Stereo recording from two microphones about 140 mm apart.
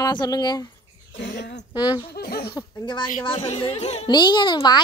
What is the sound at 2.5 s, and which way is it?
A child's voice, 35° left (ahead or behind).